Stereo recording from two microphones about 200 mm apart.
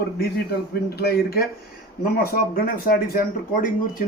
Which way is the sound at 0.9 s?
50° left (ahead or behind).